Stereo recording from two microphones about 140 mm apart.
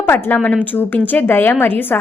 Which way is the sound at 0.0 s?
15° left (ahead or behind).